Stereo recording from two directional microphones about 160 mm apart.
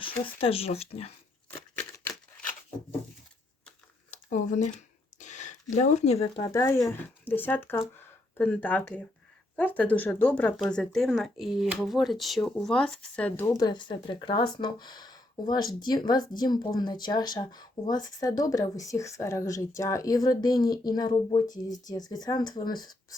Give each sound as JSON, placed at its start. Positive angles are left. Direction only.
{"t": 0.3, "sound": "speech", "side_deg": 35}
{"t": 4.1, "sound": "speech", "side_deg": 50}
{"t": 5.1, "sound": "a sound", "side_deg": 50}
{"t": 5.7, "sound": "speech", "side_deg": 45}
{"t": 6.5, "sound": "speech", "side_deg": 20}
{"t": 13.4, "sound": "speech", "side_deg": 25}